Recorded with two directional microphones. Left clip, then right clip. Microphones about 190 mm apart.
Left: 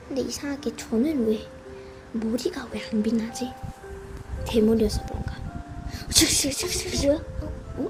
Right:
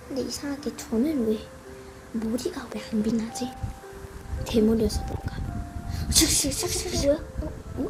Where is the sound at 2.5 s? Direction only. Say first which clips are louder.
Left 2 dB; 5° left (ahead or behind).